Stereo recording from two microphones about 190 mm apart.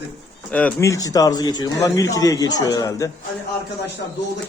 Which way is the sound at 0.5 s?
10° left (ahead or behind).